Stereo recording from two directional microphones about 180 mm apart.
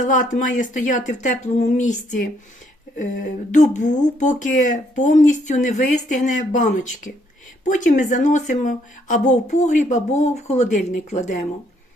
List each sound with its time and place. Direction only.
0.0 s speech: 45° left (ahead or behind)
3.5 s a woman's voice: 40° left (ahead or behind)